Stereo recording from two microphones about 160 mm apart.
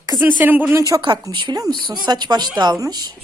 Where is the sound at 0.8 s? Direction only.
25° right (ahead or behind).